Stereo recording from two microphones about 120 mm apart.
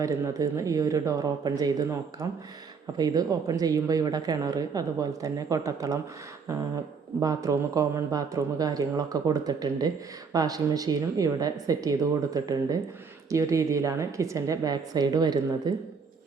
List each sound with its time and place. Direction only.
0.0 s a woman's voice: 30° right (ahead or behind)
7.2 s a woman's voice: 30° right (ahead or behind)